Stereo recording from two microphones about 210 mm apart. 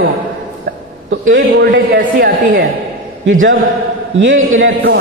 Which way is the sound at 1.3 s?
55° right (ahead or behind).